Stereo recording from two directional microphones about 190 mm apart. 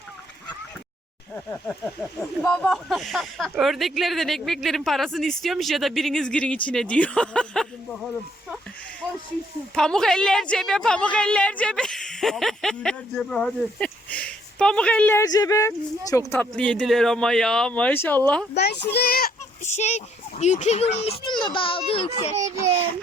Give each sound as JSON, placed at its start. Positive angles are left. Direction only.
{"t": 2.0, "sound": "a woman's voice", "side_deg": 5}
{"t": 9.7, "sound": "a woman's voice", "side_deg": 5}
{"t": 18.5, "sound": "a child's voice", "side_deg": 60}
{"t": 19.6, "sound": "a child's voice", "side_deg": 35}